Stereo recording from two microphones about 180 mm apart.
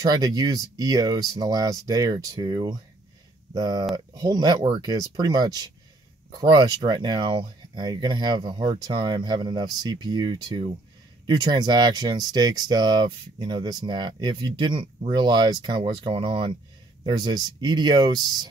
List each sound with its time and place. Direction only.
0.0 s speech: 20° right (ahead or behind)